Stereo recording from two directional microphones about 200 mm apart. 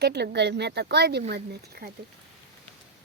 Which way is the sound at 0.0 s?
55° right (ahead or behind).